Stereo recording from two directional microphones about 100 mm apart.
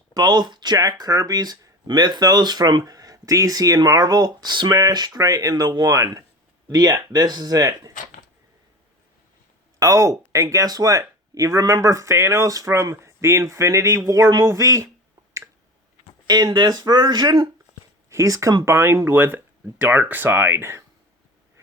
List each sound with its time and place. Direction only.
0.1 s speech: 45° right (ahead or behind)
9.8 s speech: 35° right (ahead or behind)
16.2 s speech: 40° right (ahead or behind)
18.1 s speech: 30° right (ahead or behind)